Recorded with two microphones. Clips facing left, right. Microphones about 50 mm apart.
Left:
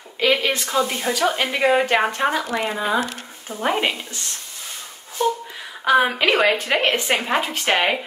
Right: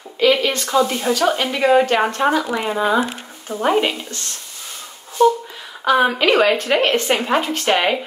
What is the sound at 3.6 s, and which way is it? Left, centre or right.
Speech, centre.